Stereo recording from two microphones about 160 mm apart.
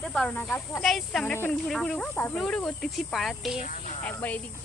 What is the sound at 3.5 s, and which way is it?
Speech, 50° left (ahead or behind).